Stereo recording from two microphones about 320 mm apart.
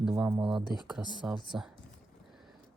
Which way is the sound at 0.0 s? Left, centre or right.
Centre.